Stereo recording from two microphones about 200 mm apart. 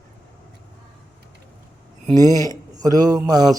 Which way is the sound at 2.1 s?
20° right (ahead or behind).